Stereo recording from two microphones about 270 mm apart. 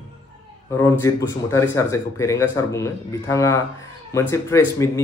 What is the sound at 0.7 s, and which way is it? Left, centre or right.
Speech, centre.